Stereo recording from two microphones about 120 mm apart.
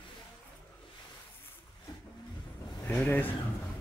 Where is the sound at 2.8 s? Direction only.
15° left (ahead or behind).